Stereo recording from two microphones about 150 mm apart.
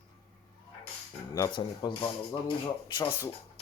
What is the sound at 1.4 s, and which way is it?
Speech, 30° left (ahead or behind).